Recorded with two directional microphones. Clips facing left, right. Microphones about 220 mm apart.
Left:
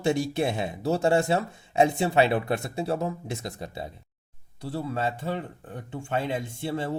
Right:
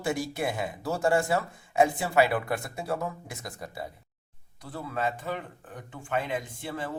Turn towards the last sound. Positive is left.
turn(degrees=30)  # may be behind; listen again after turning